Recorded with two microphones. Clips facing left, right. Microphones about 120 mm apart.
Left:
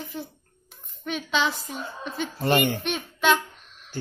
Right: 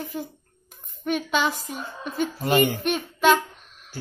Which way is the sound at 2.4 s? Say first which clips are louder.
Right 1 dB; 5° right (ahead or behind).